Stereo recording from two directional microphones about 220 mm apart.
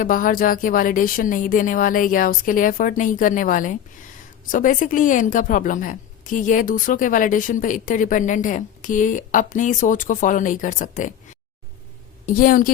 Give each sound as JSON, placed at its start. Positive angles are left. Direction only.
{"t": 0.0, "sound": "a woman's voice", "side_deg": 40}
{"t": 12.2, "sound": "a woman's voice", "side_deg": 40}